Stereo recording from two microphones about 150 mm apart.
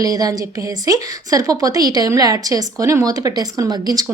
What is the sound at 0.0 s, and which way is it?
A woman's voice, 25° right (ahead or behind).